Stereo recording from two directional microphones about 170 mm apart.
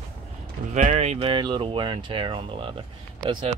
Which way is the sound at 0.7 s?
45° right (ahead or behind).